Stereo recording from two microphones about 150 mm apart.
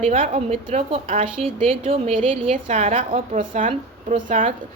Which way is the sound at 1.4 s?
40° right (ahead or behind).